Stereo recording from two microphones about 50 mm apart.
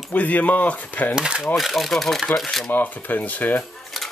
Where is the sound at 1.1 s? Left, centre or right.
Centre.